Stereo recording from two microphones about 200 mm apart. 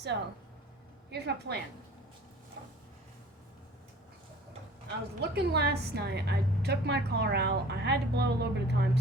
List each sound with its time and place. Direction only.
0.1 s a woman's voice: 60° right (ahead or behind)
5.2 s a woman's voice: 55° right (ahead or behind)